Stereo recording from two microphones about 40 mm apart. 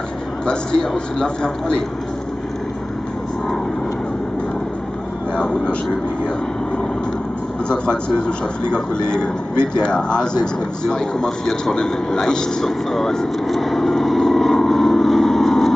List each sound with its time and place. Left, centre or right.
0.5 s a man's voice: left
5.3 s speech: left
7.6 s a man's voice: left
13.5 s vehicle: centre